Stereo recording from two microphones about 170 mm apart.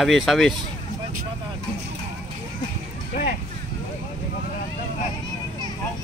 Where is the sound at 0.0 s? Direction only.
Centre (ahead or behind).